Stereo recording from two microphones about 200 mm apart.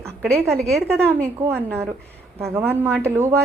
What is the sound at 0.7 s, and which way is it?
Speech, 5° left (ahead or behind).